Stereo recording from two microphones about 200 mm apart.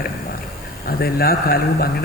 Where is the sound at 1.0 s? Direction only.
50° left (ahead or behind).